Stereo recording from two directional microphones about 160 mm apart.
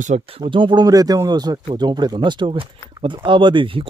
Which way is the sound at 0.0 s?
45° right (ahead or behind).